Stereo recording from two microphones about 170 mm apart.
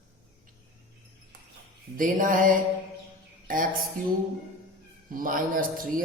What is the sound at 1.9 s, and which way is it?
Speech, 50° right (ahead or behind).